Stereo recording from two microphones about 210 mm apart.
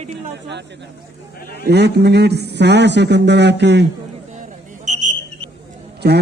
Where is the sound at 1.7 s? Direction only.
50° right (ahead or behind).